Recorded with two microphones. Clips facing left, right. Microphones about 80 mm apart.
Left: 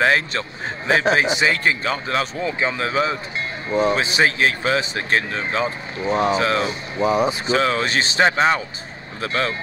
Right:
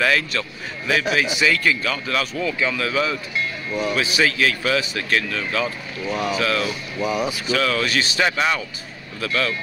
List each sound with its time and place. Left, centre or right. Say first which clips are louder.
0.0 s a man's voice: left 2 dB; left